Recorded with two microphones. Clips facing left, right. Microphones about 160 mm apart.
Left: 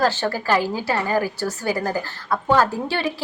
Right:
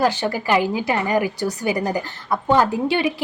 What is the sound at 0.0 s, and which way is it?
A woman's voice, 15° right (ahead or behind).